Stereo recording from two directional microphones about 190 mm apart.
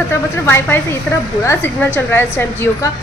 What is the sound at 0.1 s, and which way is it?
A woman's voice, 10° left (ahead or behind).